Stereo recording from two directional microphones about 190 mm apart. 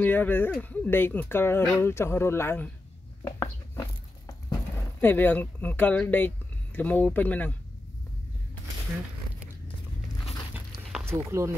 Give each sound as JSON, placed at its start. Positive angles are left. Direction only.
{"t": 0.0, "sound": "speech", "side_deg": 10}
{"t": 3.3, "sound": "a sound", "side_deg": 20}
{"t": 4.5, "sound": "speech", "side_deg": 10}
{"t": 11.1, "sound": "speech", "side_deg": -15}